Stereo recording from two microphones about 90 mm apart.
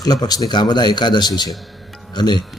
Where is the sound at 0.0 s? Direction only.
45° left (ahead or behind).